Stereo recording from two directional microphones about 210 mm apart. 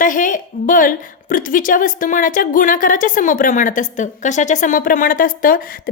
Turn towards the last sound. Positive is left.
turn(degrees=40)  # may be behind; listen again after turning